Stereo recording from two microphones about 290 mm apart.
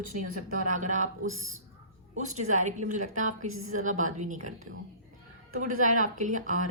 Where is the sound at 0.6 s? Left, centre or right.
Right.